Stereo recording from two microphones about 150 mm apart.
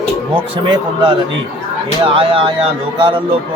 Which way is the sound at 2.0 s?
35° right (ahead or behind).